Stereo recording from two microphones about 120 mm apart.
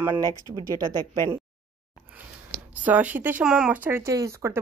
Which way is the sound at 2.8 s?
15° right (ahead or behind).